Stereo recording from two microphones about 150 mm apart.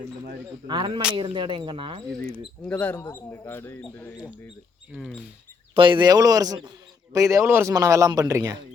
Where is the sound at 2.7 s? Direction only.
10° left (ahead or behind).